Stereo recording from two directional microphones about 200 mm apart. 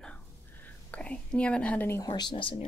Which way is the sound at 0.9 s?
5° left (ahead or behind).